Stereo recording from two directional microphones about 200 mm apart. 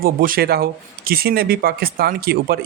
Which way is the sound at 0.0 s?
45° right (ahead or behind).